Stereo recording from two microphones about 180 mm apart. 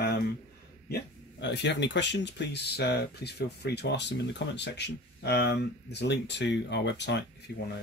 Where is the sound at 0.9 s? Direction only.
75° left (ahead or behind).